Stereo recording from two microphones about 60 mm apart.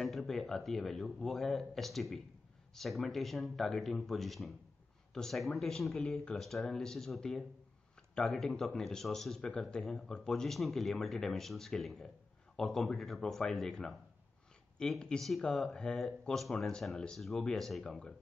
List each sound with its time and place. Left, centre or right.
0.0 s speech: centre
17.8 s speech: centre